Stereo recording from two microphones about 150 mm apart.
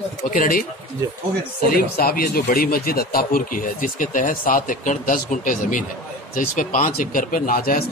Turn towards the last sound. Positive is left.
turn(degrees=75)  # may be behind; listen again after turning